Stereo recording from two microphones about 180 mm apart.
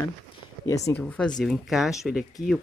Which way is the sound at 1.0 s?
5° left (ahead or behind).